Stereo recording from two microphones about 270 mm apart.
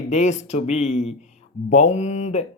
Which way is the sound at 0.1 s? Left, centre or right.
Left.